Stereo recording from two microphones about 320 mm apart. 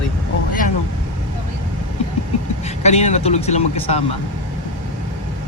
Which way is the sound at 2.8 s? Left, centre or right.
Left.